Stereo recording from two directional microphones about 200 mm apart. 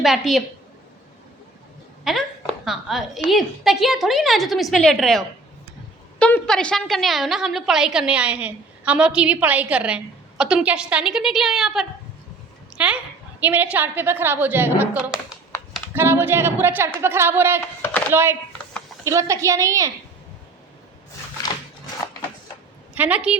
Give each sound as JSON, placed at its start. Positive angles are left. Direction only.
{"t": 0.0, "sound": "a woman's voice", "side_deg": 0}
{"t": 2.1, "sound": "a woman's voice", "side_deg": 0}
{"t": 23.0, "sound": "a woman's voice", "side_deg": -5}